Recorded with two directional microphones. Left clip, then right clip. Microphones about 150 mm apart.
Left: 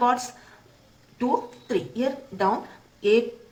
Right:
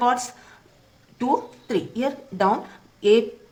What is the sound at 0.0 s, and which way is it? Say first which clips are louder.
A woman's voice: right 1 dB; 45° right (ahead or behind).